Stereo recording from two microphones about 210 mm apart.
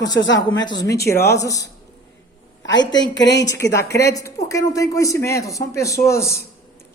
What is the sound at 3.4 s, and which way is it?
Speech, 15° left (ahead or behind).